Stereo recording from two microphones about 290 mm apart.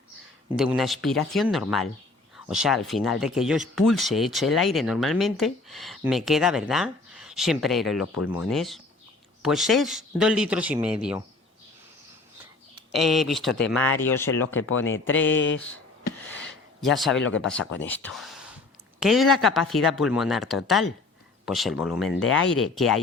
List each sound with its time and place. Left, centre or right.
0.5 s speech: centre
8.0 s speech: left
8.3 s speech: centre
12.9 s speech: centre
14.4 s speech: left
16.2 s a sound: centre
16.8 s speech: centre
17.2 s speech: left
17.8 s speech: centre
22.2 s speech: left
22.5 s speech: centre